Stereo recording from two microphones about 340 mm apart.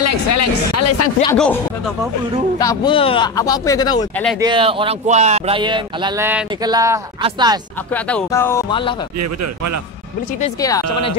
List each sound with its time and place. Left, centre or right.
0.0 s speech: left
1.2 s speech: centre
2.6 s speech: centre
4.4 s speech: centre
7.9 s speech: centre
9.2 s speech: right